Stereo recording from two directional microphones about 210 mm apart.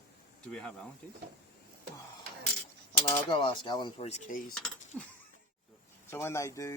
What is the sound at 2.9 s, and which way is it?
Speech, 10° left (ahead or behind).